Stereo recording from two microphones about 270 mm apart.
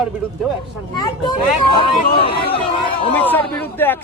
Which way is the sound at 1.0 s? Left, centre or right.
Centre.